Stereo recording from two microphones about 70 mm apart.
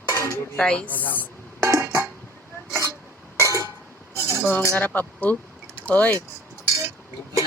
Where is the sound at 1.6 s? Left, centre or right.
Right.